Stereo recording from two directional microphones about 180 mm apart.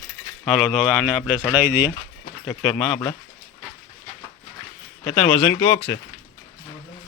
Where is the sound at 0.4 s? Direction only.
Centre (ahead or behind).